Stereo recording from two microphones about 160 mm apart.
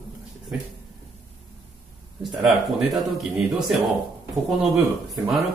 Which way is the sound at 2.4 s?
Centre (ahead or behind).